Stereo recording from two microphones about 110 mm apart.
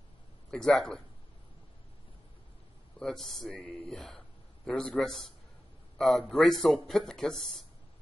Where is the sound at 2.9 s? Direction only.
5° left (ahead or behind).